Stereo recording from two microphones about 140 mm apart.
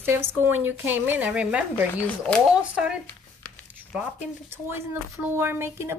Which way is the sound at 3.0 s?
15° left (ahead or behind).